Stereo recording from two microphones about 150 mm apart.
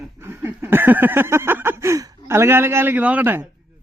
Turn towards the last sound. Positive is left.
turn(degrees=-15)  # may be behind; listen again after turning